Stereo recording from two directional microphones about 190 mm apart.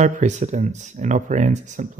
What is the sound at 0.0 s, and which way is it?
Speech, 35° right (ahead or behind).